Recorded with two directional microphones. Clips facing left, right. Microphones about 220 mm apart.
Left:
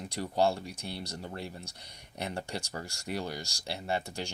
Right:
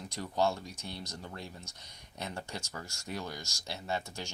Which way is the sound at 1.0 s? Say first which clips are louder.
Left 4 dB; 30° left (ahead or behind).